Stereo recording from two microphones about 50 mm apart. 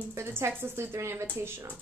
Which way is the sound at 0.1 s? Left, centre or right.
Right.